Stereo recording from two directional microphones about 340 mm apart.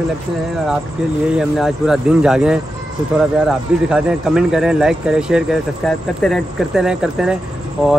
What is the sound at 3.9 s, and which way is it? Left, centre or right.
Speech, centre.